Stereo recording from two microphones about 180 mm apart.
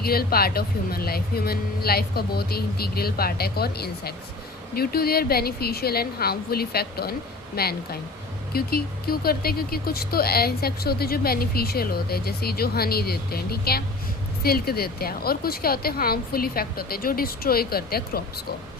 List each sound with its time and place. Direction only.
0.0 s speech: 55° left (ahead or behind)